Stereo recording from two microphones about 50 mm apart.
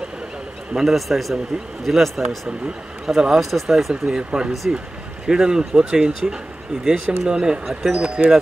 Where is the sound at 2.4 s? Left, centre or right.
Centre.